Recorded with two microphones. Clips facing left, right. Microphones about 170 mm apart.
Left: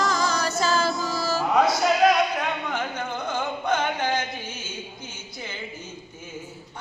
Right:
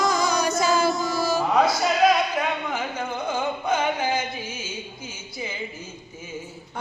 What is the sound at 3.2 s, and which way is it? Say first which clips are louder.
Music: right 1 dB; 5° right (ahead or behind).